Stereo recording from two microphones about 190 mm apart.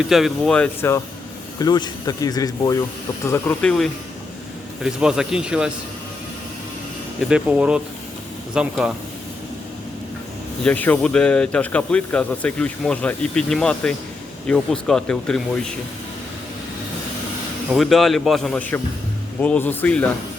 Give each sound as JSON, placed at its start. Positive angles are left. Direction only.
{"t": 0.0, "sound": "speech", "side_deg": 0}
{"t": 7.2, "sound": "speech", "side_deg": -5}
{"t": 10.6, "sound": "speech", "side_deg": 5}
{"t": 17.7, "sound": "speech", "side_deg": 0}